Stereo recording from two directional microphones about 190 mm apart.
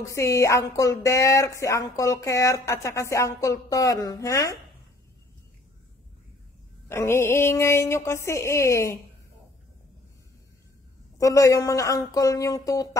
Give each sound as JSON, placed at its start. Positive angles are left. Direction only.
{"t": 0.0, "sound": "speech", "side_deg": 15}
{"t": 6.9, "sound": "speech", "side_deg": 15}
{"t": 11.1, "sound": "speech", "side_deg": 15}